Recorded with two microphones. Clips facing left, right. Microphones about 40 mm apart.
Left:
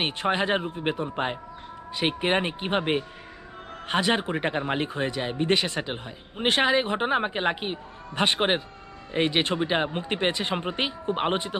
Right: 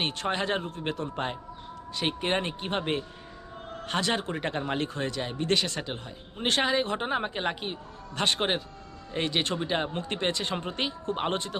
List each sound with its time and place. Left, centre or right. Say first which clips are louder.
0.0 s speech: left 4 dB; centre